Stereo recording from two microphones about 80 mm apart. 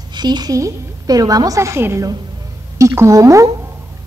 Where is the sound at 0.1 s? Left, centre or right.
Right.